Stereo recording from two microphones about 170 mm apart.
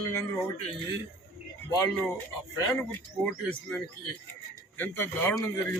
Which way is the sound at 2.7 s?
10° left (ahead or behind).